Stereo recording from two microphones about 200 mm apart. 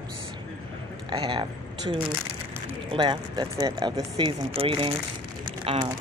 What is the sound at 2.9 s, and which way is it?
Speech, 25° right (ahead or behind).